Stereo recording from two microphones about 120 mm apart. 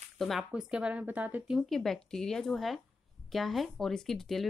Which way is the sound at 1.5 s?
Centre (ahead or behind).